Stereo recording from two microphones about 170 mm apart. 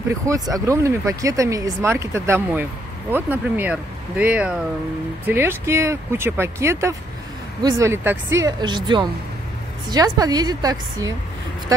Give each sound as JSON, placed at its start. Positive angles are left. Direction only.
{"t": 0.3, "sound": "speech", "side_deg": -20}